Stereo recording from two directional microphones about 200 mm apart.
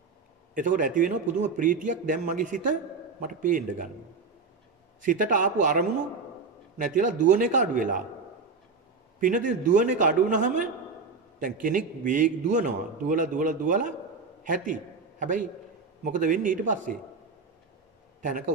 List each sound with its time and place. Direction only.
0.6 s a man's voice: 40° right (ahead or behind)
5.0 s a man's voice: 40° right (ahead or behind)
9.2 s a man's voice: 40° right (ahead or behind)